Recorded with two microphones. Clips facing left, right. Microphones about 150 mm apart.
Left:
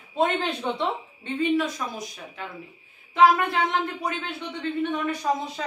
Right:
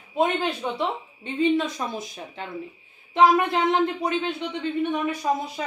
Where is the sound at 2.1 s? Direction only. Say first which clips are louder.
Right 3 dB; 25° right (ahead or behind).